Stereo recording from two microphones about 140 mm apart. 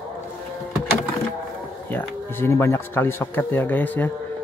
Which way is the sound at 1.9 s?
15° left (ahead or behind).